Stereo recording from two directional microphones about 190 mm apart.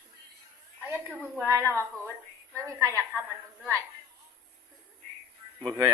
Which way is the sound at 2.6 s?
15° right (ahead or behind).